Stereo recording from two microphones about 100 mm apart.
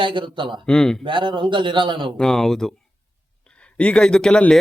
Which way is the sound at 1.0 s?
55° right (ahead or behind).